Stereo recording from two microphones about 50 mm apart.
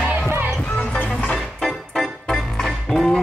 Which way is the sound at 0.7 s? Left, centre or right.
Left.